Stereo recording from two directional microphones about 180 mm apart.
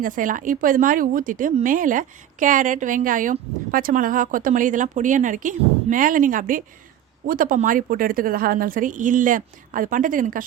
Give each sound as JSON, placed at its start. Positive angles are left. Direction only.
{"t": 0.0, "sound": "speech", "side_deg": -45}